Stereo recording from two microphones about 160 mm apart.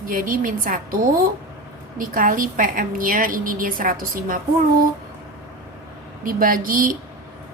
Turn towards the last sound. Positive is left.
turn(degrees=-60)  # may be behind; listen again after turning